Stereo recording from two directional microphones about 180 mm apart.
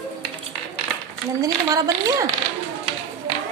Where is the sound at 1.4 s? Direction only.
20° right (ahead or behind).